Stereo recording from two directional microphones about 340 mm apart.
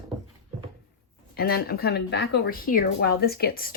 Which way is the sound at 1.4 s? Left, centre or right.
Left.